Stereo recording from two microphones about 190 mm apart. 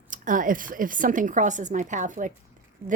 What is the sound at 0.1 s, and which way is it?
A woman's voice, 45° right (ahead or behind).